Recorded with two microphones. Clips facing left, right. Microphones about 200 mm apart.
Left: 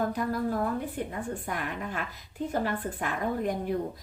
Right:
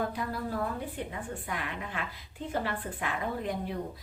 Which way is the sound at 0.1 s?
45° left (ahead or behind).